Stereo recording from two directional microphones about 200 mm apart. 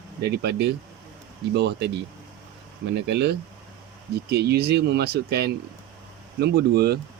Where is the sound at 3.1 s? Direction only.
60° right (ahead or behind).